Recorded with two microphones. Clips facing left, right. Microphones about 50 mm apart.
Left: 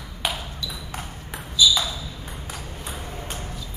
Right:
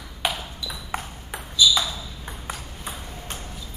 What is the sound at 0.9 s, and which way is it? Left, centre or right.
Ping, right.